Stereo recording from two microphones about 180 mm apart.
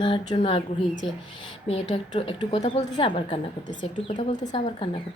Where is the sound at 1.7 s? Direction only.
30° left (ahead or behind).